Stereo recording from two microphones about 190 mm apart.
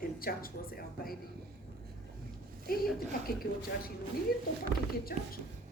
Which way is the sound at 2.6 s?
50° left (ahead or behind).